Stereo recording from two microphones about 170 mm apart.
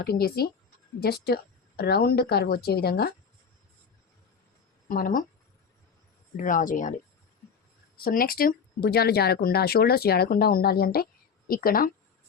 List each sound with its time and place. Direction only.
0.0 s speech: 65° left (ahead or behind)
4.9 s speech: 55° left (ahead or behind)
6.3 s speech: 50° left (ahead or behind)
7.9 s speech: 60° left (ahead or behind)